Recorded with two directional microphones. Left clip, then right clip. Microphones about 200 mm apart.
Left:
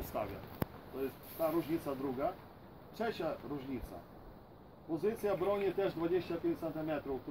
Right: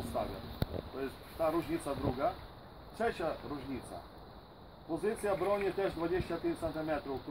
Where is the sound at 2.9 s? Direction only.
Centre (ahead or behind).